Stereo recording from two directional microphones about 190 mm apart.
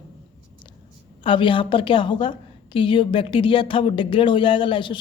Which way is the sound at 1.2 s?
25° left (ahead or behind).